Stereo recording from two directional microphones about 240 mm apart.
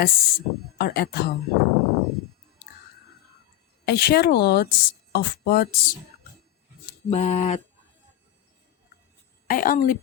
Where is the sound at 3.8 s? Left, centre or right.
Left.